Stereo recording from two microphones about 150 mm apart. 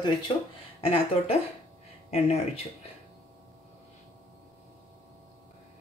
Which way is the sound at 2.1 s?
45° left (ahead or behind).